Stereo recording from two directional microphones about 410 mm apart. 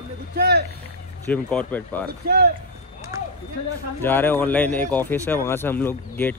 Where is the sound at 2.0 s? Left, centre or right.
Right.